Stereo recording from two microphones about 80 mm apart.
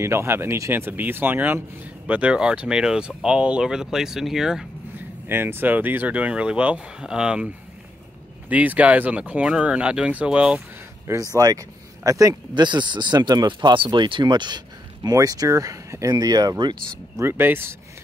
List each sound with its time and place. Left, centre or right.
0.0 s speech: right; by 4.6 s centre
4.9 s speech: right
11.1 s speech: right
12.5 s speech: right
15.1 s speech: right
17.2 s speech: right